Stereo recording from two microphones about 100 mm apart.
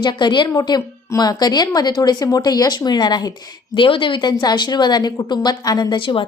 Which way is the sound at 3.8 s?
60° left (ahead or behind).